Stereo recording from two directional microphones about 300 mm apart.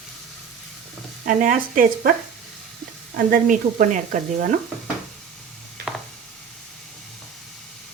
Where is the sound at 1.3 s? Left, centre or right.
Right.